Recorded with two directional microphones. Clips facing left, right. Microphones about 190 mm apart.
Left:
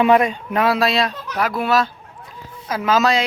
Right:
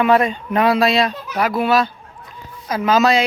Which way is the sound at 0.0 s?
10° left (ahead or behind).